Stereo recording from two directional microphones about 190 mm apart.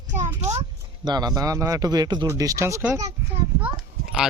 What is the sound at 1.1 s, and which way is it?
Speech, 20° right (ahead or behind).